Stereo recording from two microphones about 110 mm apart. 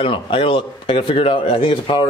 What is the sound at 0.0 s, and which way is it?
Speech, 50° left (ahead or behind).